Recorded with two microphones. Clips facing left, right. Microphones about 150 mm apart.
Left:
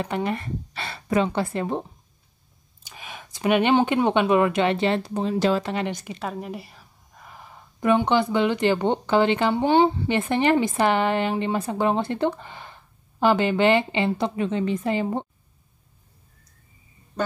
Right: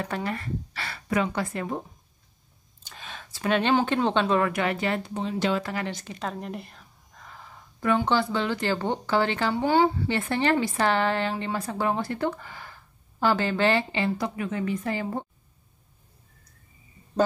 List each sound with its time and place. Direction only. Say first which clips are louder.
0.0 s a woman's voice: left 4 dB; 20° left (ahead or behind)
2.8 s speech: left 2 dB; 10° left (ahead or behind); by 5.0 s 25° left (ahead or behind)
5.0 s speech: left 5 dB; 40° left (ahead or behind)
5.6 s a woman's voice: left 4 dB; 25° left (ahead or behind)
6.1 s a woman's voice: left 2 dB; 5° left (ahead or behind); by 15.2 s 20° left (ahead or behind)